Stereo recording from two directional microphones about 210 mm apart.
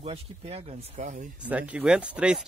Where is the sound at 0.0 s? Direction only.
30° right (ahead or behind).